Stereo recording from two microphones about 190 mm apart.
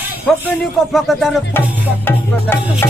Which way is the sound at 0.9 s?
Centre (ahead or behind).